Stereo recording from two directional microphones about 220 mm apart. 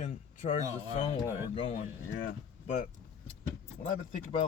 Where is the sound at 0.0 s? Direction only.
35° left (ahead or behind).